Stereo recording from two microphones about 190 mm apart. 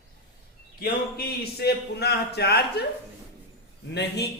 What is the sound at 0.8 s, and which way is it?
Speech, 55° left (ahead or behind).